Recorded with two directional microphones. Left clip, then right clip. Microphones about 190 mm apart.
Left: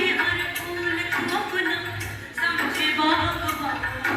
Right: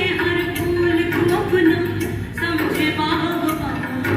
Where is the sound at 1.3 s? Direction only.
40° right (ahead or behind).